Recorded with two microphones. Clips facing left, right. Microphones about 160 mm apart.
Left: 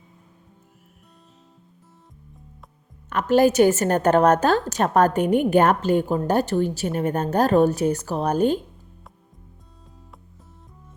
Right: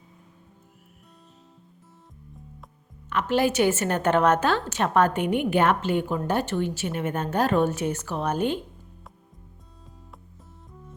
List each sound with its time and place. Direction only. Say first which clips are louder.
3.1 s a woman's voice: left 6 dB; 45° left (ahead or behind)